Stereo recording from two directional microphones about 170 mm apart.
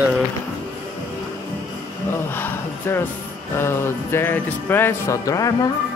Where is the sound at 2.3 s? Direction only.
10° left (ahead or behind).